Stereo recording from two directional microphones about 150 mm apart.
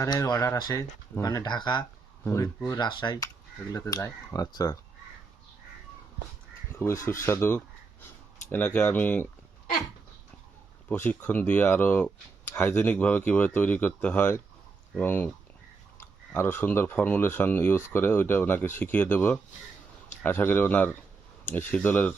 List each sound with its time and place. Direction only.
0.0 s speech: 25° left (ahead or behind)
2.2 s speech: 20° left (ahead or behind)
2.8 s speech: 30° left (ahead or behind)
6.7 s speech: 20° left (ahead or behind)
10.8 s speech: 15° left (ahead or behind)